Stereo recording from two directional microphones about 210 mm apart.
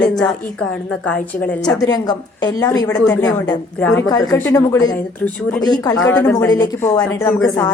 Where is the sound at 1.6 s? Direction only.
20° left (ahead or behind).